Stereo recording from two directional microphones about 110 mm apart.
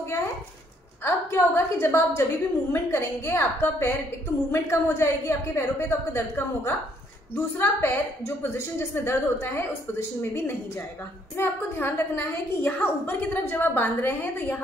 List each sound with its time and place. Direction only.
1.0 s a woman's voice: 20° left (ahead or behind)